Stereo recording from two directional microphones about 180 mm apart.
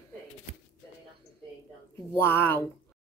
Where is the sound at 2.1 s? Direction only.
10° left (ahead or behind).